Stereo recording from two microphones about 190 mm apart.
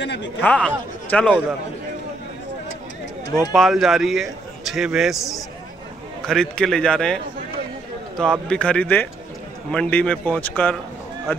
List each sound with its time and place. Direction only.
0.0 s speech: 70° left (ahead or behind)
0.4 s a man's voice: 5° left (ahead or behind)
3.5 s a man's voice: centre (ahead or behind)
8.2 s a man's voice: 5° left (ahead or behind)